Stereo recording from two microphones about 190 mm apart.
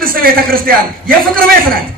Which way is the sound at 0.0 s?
50° right (ahead or behind).